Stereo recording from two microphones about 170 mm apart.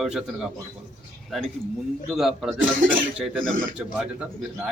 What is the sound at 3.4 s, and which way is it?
Speech, 50° right (ahead or behind).